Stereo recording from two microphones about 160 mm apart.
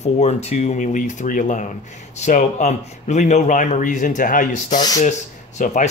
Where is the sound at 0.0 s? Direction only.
45° left (ahead or behind).